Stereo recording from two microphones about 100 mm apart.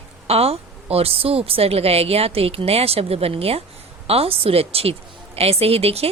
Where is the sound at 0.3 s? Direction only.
90° right.